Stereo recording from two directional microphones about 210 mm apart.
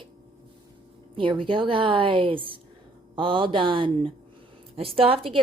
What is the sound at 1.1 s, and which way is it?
A woman's voice, 25° right (ahead or behind).